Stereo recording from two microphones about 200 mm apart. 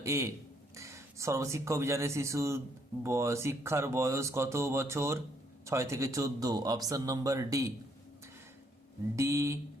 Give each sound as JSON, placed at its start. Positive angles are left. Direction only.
{"t": 0.0, "sound": "speech", "side_deg": -15}
{"t": 9.1, "sound": "speech", "side_deg": -15}